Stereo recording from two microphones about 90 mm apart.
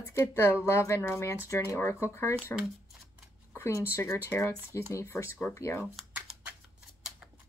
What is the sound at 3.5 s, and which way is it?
Speech, 30° left (ahead or behind).